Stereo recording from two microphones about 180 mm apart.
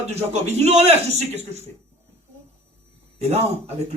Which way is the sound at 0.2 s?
35° right (ahead or behind).